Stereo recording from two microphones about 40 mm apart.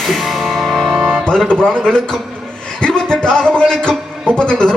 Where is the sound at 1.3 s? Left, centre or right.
Left.